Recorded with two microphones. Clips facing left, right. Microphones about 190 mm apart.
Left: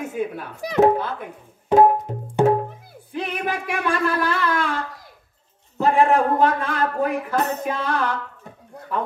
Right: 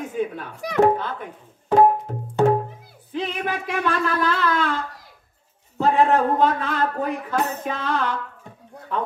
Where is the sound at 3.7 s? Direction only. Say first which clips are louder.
Left 1 dB; 10° left (ahead or behind).